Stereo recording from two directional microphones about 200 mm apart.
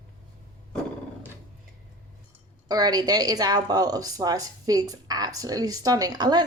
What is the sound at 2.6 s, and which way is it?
A woman's voice, 20° right (ahead or behind).